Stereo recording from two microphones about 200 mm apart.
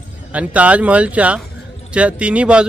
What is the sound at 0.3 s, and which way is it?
A man's voice, 5° right (ahead or behind).